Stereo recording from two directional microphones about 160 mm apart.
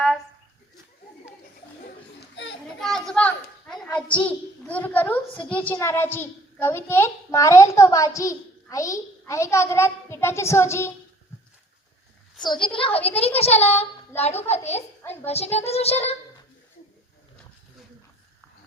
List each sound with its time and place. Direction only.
2.2 s children playing: 90° left
2.8 s a woman's voice: 5° left (ahead or behind)
12.6 s a woman's voice: 35° left (ahead or behind)
15.0 s a child's voice: 15° left (ahead or behind)
15.3 s a woman's voice: 40° left (ahead or behind)